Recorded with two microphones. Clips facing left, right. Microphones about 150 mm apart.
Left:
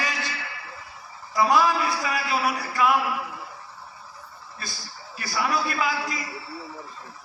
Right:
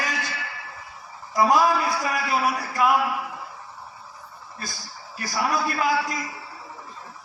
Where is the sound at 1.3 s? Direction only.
45° right (ahead or behind).